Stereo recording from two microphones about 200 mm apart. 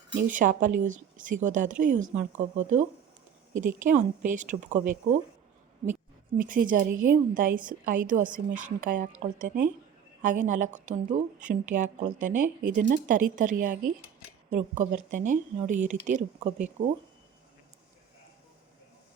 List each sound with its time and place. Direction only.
0.1 s a woman's voice: 40° right (ahead or behind)